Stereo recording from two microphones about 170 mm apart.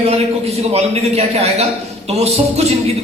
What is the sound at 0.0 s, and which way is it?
A man's voice, 40° right (ahead or behind).